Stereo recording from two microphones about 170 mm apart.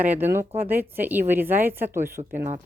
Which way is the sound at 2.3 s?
45° right (ahead or behind).